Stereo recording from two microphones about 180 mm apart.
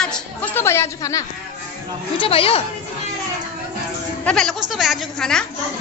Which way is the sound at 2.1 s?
30° left (ahead or behind).